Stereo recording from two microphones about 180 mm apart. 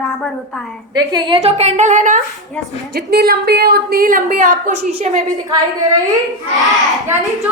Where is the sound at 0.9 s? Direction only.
25° right (ahead or behind).